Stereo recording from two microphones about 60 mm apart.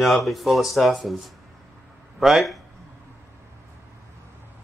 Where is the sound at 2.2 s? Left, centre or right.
Centre.